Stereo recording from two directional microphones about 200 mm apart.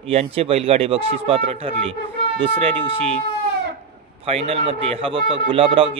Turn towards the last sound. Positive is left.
turn(degrees=-25)  # may be behind; listen again after turning